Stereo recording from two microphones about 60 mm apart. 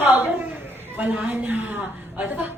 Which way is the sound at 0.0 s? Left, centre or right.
Right.